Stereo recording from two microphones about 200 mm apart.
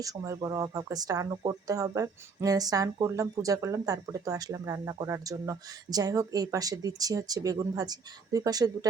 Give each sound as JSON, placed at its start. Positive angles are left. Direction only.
{"t": 0.0, "sound": "speech", "side_deg": -15}